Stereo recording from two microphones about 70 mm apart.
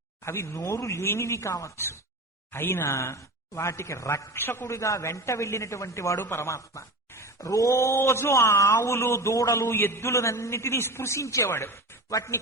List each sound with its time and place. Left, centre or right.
0.3 s speech: left
4.4 s a man's voice: left
11.5 s speech: left